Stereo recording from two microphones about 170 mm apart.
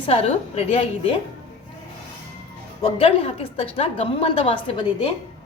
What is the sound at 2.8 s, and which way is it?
A woman's voice, 35° left (ahead or behind).